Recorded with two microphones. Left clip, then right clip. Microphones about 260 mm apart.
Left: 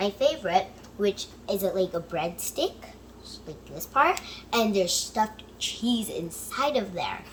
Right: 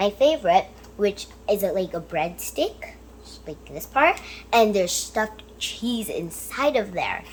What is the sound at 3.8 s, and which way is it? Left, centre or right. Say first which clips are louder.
A woman's voice: right 3 dB; centre.